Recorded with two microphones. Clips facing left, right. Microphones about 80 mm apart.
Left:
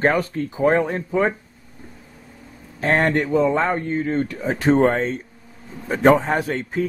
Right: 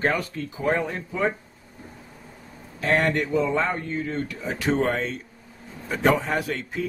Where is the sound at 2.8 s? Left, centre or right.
Left.